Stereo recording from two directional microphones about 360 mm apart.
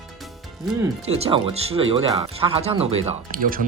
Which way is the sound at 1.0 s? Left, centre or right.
Centre.